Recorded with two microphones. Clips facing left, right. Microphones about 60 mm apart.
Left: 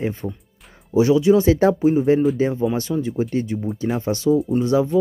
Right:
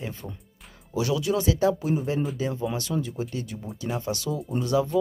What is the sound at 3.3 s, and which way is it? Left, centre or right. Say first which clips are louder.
Speech: left 11 dB; left.